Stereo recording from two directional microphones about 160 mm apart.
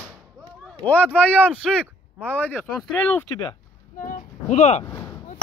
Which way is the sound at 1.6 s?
Centre (ahead or behind).